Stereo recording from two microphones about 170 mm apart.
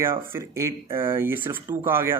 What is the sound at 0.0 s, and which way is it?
Speech, 15° right (ahead or behind).